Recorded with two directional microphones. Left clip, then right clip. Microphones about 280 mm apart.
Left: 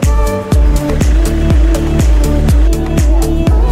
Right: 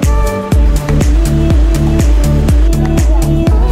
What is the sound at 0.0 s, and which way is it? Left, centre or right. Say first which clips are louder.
Music: even; centre.